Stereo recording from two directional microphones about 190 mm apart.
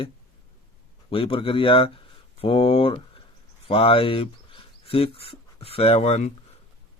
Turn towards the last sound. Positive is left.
turn(degrees=35)  # may be behind; listen again after turning